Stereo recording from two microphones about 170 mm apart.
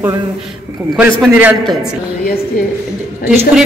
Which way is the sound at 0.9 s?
5° right (ahead or behind).